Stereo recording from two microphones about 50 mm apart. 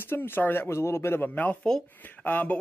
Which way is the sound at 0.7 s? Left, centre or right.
Left.